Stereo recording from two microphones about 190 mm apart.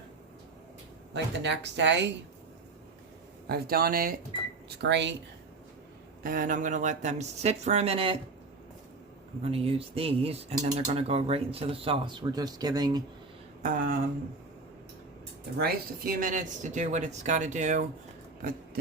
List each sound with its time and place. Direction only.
1.1 s speech: 65° right (ahead or behind)
3.4 s speech: 55° right (ahead or behind)
4.8 s speech: 65° right (ahead or behind)
6.2 s speech: 45° right (ahead or behind); by 8.2 s 30° right (ahead or behind)
9.4 s speech: 30° right (ahead or behind)
13.6 s speech: 45° right (ahead or behind)
15.5 s speech: 50° right (ahead or behind)